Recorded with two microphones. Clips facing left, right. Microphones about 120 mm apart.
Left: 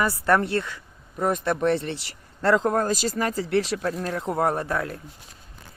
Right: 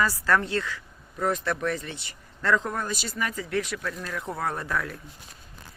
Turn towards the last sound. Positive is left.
turn(degrees=30)  # may be behind; listen again after turning